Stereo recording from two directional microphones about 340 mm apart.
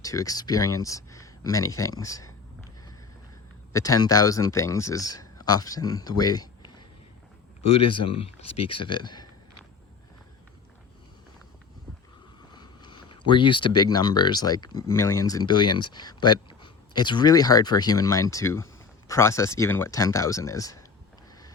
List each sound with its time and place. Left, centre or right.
0.0 s speech: centre
7.6 s speech: centre
12.5 s speech: centre